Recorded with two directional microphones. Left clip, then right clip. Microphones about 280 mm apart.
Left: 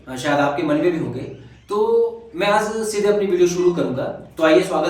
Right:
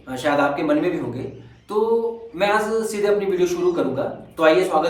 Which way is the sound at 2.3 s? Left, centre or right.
Centre.